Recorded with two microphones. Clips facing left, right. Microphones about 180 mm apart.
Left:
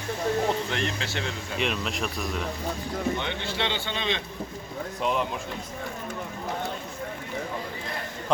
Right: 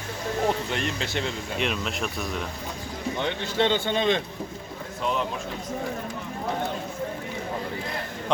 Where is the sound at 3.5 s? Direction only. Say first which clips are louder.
Right 6 dB; 50° right (ahead or behind).